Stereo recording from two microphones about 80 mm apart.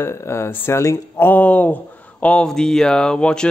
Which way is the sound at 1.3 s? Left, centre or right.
Centre.